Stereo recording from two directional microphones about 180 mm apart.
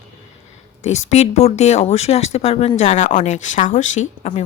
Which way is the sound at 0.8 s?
40° left (ahead or behind).